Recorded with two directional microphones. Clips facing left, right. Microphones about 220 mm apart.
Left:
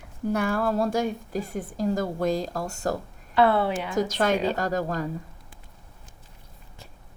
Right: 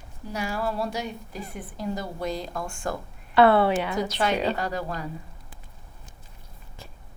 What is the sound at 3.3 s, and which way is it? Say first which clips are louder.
Speech: right 3 dB; 70° right (ahead or behind).